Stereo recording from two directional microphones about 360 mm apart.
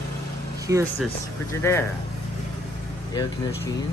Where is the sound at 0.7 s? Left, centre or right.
Centre.